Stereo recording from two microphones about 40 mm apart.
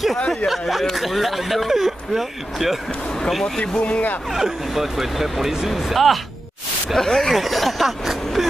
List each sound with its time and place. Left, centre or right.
0.5 s speech: centre
3.2 s a sound: centre
3.6 s speech: left
4.3 s speech: centre
7.0 s speech: centre
7.3 s speech: centre